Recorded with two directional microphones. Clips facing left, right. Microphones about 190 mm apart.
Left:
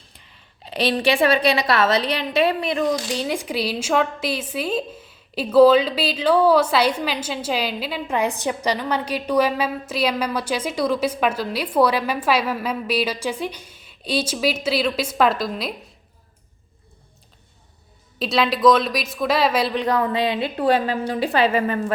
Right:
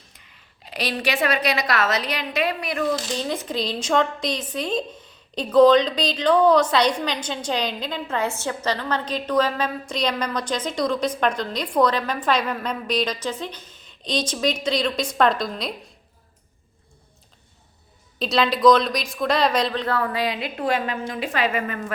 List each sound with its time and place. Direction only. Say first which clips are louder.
0.6 s a woman's voice: left 5 dB; 30° left (ahead or behind); by 15.7 s 5° left (ahead or behind)
18.2 s a woman's voice: even; centre (ahead or behind); by 21.9 s 30° left (ahead or behind)